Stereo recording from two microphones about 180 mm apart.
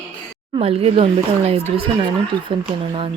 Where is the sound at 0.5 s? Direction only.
35° right (ahead or behind).